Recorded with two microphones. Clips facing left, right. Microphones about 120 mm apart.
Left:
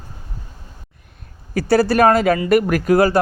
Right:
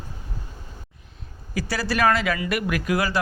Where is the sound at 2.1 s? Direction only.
40° left (ahead or behind).